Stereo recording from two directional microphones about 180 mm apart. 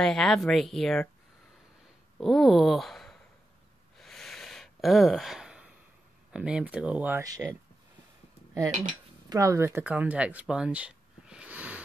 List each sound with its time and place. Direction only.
0.0 s speech: 5° left (ahead or behind)
2.1 s a sound: centre (ahead or behind)
6.3 s speech: 5° right (ahead or behind)
7.2 s speech: 20° right (ahead or behind)
9.3 s speech: 20° right (ahead or behind)